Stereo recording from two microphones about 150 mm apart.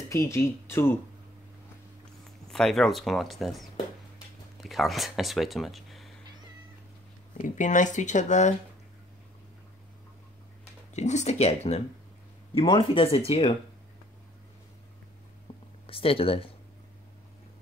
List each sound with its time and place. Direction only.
0.1 s speech: 20° left (ahead or behind)
2.5 s speech: 5° left (ahead or behind)
4.6 s speech: centre (ahead or behind)
7.3 s speech: 55° left (ahead or behind)
11.0 s speech: 50° left (ahead or behind)
15.5 s a sound: 30° left (ahead or behind)
15.9 s speech: 40° left (ahead or behind)